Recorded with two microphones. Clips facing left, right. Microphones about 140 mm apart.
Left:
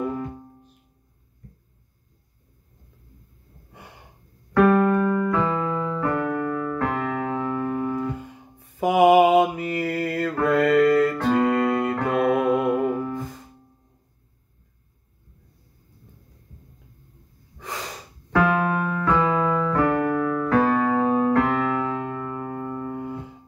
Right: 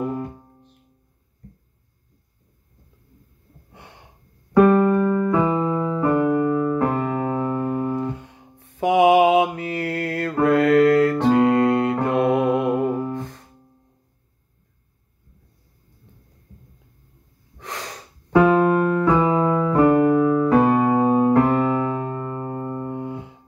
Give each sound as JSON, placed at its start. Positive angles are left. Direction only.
{"t": 3.7, "sound": "gasp", "side_deg": 0}
{"t": 4.6, "sound": "keyboard", "side_deg": -25}
{"t": 8.2, "sound": "mantra", "side_deg": 0}
{"t": 10.4, "sound": "music", "side_deg": 0}
{"t": 17.6, "sound": "snort", "side_deg": 5}
{"t": 18.3, "sound": "keyboard", "side_deg": -20}
{"t": 22.9, "sound": "music", "side_deg": 0}